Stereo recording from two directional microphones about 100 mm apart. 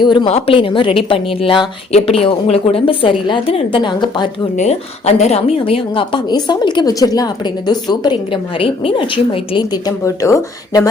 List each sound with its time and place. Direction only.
0.0 s a woman's voice: 50° left (ahead or behind)
0.3 s a woman's voice: 80° left; by 4.3 s 50° left (ahead or behind)
5.0 s a woman's voice: 90° left; by 8.4 s 45° left (ahead or behind)
8.5 s a woman's voice: 65° left (ahead or behind)
9.7 s speech: 35° left (ahead or behind)